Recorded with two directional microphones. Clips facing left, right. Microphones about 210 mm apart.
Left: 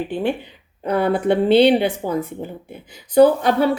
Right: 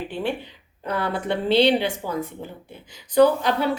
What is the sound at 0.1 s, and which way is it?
A woman's voice, 50° left (ahead or behind).